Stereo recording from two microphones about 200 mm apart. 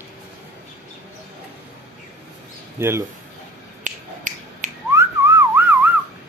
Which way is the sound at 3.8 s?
40° right (ahead or behind).